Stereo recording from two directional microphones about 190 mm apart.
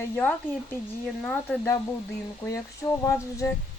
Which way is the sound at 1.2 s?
5° left (ahead or behind).